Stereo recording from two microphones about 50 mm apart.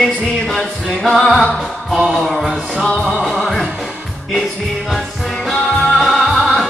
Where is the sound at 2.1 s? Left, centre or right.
Centre.